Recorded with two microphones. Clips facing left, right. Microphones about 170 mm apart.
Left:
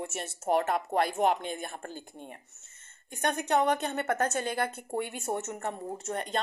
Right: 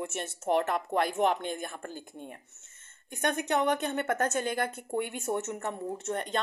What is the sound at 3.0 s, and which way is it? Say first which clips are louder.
A woman's voice: even; 50° right (ahead or behind).